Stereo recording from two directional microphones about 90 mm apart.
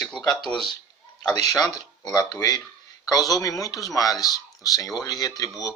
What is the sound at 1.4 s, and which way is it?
Speech, 45° left (ahead or behind).